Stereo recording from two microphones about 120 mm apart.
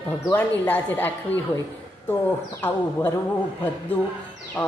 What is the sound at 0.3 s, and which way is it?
Speech, 15° left (ahead or behind).